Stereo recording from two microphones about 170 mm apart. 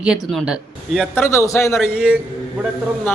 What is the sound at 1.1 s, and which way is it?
Speech, 15° left (ahead or behind).